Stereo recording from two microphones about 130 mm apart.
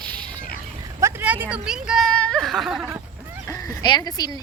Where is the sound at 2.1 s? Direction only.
5° left (ahead or behind).